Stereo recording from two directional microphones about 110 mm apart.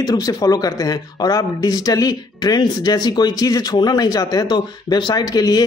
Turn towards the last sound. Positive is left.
turn(degrees=35)  # may be behind; listen again after turning